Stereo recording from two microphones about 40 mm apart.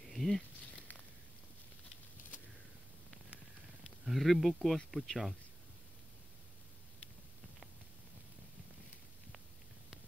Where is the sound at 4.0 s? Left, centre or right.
Centre.